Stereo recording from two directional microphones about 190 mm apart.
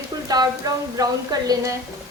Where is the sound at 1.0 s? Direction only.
20° right (ahead or behind).